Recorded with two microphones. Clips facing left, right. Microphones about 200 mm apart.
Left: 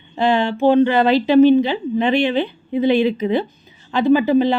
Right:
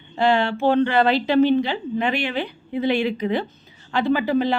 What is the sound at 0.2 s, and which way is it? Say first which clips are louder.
A woman's voice: left 3 dB; 20° left (ahead or behind).